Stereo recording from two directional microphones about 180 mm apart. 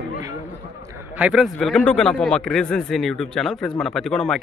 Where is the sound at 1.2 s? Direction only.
5° right (ahead or behind).